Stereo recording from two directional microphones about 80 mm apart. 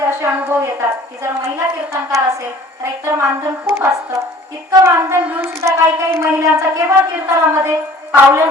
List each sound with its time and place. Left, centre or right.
0.2 s a woman's voice: right